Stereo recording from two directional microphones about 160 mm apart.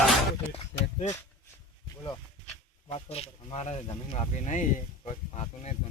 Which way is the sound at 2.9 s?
40° left (ahead or behind).